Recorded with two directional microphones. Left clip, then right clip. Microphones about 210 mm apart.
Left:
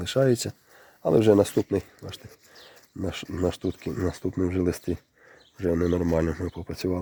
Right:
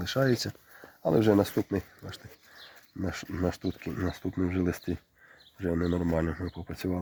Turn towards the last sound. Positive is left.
turn(degrees=40)  # may be behind; listen again after turning